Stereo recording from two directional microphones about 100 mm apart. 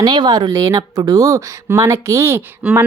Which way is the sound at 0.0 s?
45° right (ahead or behind).